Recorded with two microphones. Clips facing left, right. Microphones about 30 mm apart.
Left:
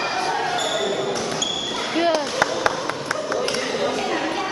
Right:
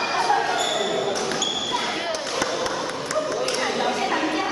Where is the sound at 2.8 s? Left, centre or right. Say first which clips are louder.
Even; left.